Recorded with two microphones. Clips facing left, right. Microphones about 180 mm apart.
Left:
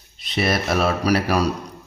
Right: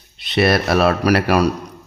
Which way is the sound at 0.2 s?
70° right (ahead or behind).